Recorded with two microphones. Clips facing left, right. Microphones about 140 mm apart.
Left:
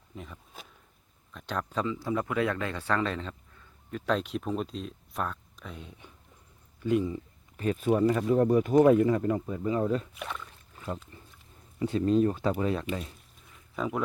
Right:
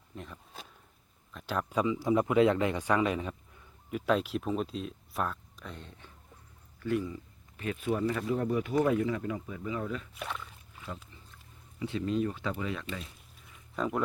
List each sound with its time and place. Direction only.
0.2 s speech: centre (ahead or behind)
6.8 s speech: 20° left (ahead or behind)
7.5 s speech: 40° left (ahead or behind)
10.2 s speech: centre (ahead or behind)
11.8 s speech: 40° left (ahead or behind)
13.7 s speech: centre (ahead or behind)